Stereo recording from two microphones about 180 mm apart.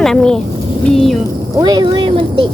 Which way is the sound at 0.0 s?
5° left (ahead or behind).